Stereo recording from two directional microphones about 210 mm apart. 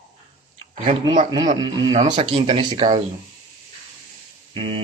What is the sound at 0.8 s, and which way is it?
Speech, 30° right (ahead or behind).